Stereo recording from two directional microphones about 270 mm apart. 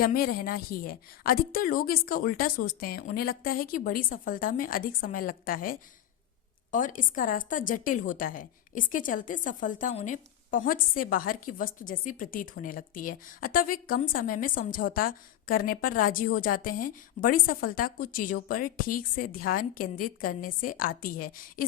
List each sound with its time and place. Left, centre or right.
0.0 s a woman's voice: left